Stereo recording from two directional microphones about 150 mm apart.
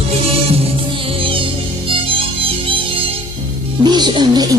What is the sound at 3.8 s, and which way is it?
Music, 30° right (ahead or behind).